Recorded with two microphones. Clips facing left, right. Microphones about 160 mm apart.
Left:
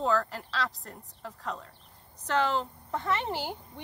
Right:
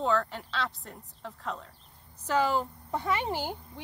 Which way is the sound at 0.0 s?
Centre (ahead or behind).